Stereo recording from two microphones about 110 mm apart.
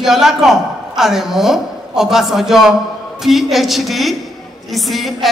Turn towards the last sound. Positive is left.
turn(degrees=0)  # may be behind; listen again after turning